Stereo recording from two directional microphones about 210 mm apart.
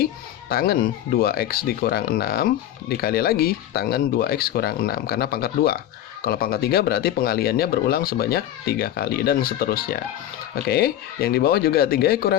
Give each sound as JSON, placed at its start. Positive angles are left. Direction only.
{"t": 0.0, "sound": "speech", "side_deg": 45}